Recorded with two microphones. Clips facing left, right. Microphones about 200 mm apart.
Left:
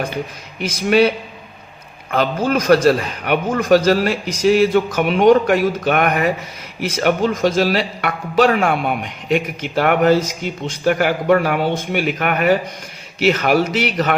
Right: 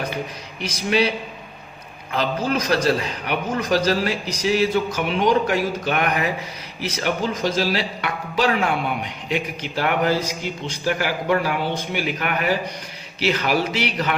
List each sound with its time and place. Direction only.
0.7 s a man's voice: 50° left (ahead or behind)